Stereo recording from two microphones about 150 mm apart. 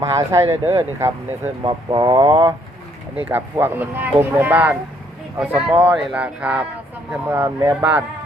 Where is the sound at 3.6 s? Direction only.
15° right (ahead or behind).